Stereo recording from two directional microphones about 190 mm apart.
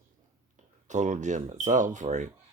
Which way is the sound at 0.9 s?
40° right (ahead or behind).